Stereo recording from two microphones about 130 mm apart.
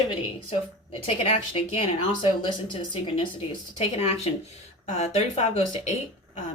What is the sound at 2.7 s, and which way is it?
Speech, 40° left (ahead or behind).